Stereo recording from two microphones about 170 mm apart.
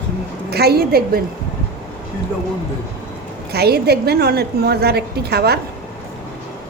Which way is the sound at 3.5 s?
70° right (ahead or behind).